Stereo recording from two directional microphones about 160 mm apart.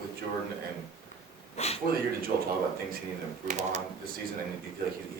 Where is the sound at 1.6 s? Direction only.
40° left (ahead or behind).